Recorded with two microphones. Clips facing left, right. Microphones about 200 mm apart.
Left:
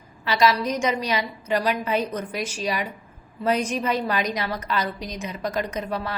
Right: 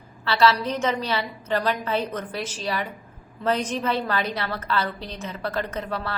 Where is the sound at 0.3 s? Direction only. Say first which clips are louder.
Even; 15° left (ahead or behind).